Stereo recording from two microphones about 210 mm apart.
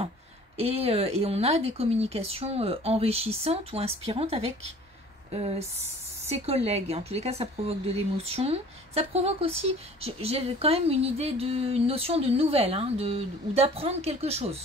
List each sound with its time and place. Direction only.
0.6 s speech: 30° right (ahead or behind)